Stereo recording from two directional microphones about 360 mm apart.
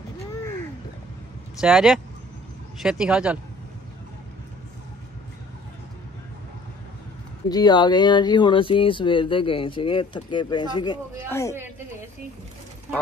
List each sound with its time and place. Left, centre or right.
1.6 s speech: centre
7.4 s speech: centre